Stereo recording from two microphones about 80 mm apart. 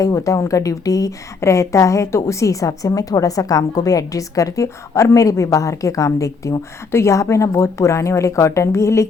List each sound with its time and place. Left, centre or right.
0.0 s a woman's voice: left